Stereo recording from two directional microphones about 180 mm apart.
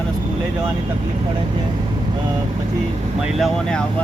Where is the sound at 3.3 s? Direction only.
Centre (ahead or behind).